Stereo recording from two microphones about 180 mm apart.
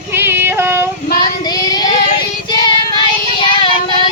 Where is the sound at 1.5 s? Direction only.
20° left (ahead or behind).